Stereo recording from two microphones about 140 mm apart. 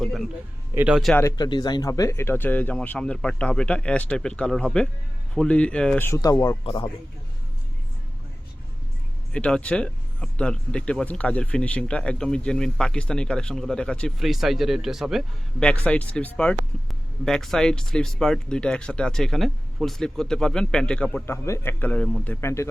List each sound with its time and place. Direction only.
0.0 s a sound: centre (ahead or behind)
0.7 s speech: 15° right (ahead or behind)
1.4 s speech: 30° left (ahead or behind)
6.7 s speech: 35° left (ahead or behind)
9.3 s speech: 5° left (ahead or behind)
15.6 s speech: 10° left (ahead or behind)